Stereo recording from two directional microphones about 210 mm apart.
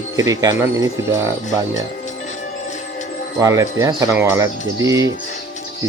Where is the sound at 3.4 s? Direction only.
15° right (ahead or behind).